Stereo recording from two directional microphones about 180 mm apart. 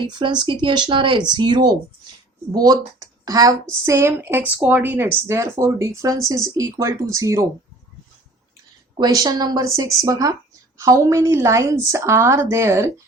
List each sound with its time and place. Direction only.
0.2 s speech: 25° right (ahead or behind)
9.0 s speech: 20° right (ahead or behind)